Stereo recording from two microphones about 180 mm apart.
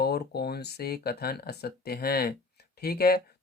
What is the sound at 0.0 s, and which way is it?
Speech, 60° left (ahead or behind).